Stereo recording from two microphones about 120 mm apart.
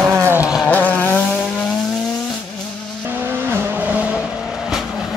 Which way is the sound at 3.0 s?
20° right (ahead or behind).